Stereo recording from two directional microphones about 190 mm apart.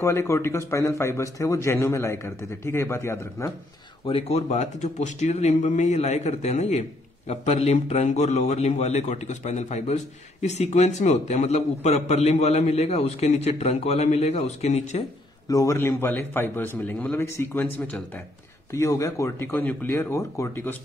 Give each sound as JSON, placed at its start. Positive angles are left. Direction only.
{"t": 0.0, "sound": "speech", "side_deg": 15}
{"t": 4.0, "sound": "a man's voice", "side_deg": 30}
{"t": 15.4, "sound": "speech", "side_deg": 15}